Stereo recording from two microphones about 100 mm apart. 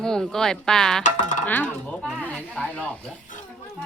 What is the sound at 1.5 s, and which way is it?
Speech, 15° left (ahead or behind).